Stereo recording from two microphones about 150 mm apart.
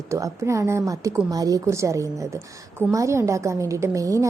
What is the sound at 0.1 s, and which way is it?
A woman's voice, 20° right (ahead or behind).